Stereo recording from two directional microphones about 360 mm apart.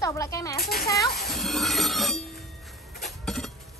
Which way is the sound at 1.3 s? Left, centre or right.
Centre.